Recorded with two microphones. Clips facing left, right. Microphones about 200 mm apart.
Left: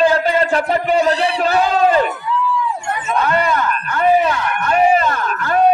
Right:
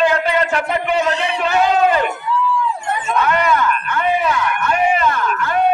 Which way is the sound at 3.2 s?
35° left (ahead or behind).